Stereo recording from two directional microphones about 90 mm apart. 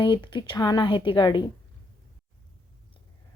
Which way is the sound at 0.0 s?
60° left (ahead or behind).